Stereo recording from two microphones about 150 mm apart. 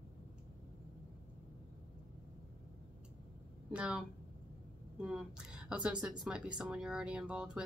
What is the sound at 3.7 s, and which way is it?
Speech, 5° right (ahead or behind).